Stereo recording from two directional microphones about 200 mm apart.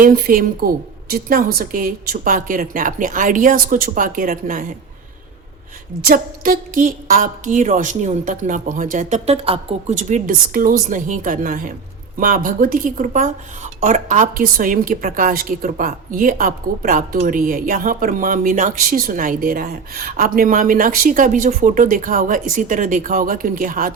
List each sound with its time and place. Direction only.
0.0 s speech: 45° right (ahead or behind)
6.1 s a woman's voice: 45° right (ahead or behind)